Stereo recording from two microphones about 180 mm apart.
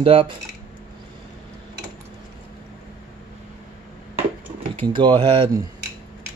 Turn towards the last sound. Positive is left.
turn(degrees=-25)  # may be behind; listen again after turning